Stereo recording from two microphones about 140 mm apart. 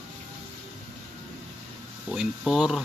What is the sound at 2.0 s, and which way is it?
Speech, 5° right (ahead or behind).